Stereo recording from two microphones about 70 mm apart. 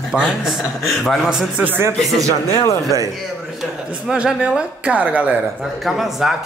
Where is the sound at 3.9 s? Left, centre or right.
Centre.